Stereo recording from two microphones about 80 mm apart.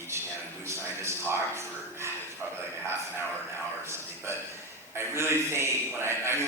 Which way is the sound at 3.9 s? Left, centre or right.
Right.